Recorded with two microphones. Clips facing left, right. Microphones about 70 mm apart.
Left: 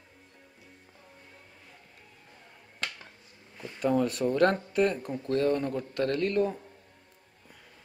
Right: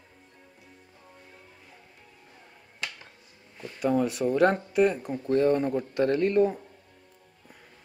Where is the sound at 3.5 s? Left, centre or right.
Centre.